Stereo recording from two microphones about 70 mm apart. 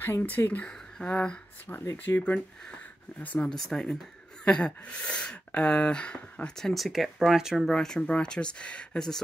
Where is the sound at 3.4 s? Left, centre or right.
Centre.